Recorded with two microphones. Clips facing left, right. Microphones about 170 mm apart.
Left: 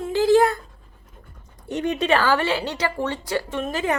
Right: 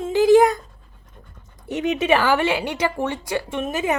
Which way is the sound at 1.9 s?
15° right (ahead or behind).